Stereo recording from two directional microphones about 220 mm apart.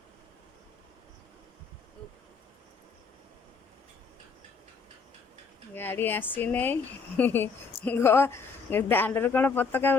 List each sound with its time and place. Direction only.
5.7 s a woman's voice: 10° left (ahead or behind)